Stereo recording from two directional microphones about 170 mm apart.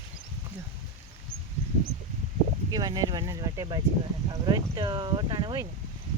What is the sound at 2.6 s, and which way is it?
Speech, 20° right (ahead or behind).